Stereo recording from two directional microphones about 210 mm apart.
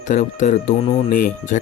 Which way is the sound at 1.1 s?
40° left (ahead or behind).